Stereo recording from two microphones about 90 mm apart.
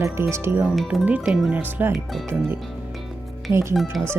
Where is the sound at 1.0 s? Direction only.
10° right (ahead or behind).